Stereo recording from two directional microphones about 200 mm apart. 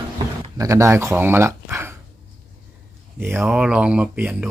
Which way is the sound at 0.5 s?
15° right (ahead or behind).